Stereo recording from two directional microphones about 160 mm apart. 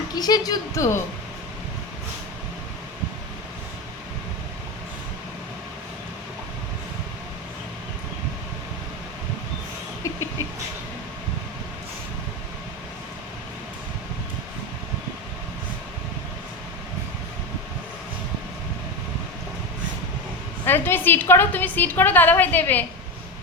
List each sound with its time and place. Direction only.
0.1 s a woman's voice: 25° left (ahead or behind)
20.7 s a woman's voice: 15° left (ahead or behind)